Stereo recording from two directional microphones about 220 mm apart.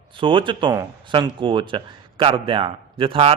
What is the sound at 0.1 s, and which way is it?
Speech, 20° right (ahead or behind).